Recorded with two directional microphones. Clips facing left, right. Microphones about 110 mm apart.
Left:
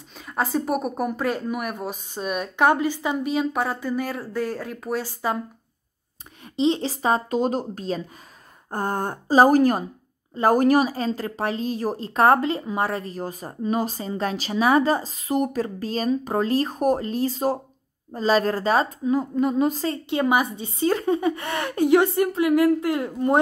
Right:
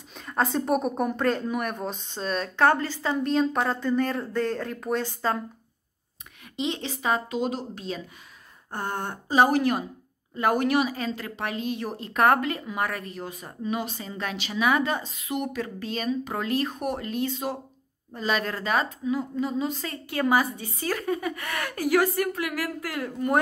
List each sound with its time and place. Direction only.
0.1 s speech: 5° left (ahead or behind)
6.5 s a woman's voice: 30° left (ahead or behind); by 19.7 s 50° left (ahead or behind)
19.7 s speech: 30° left (ahead or behind)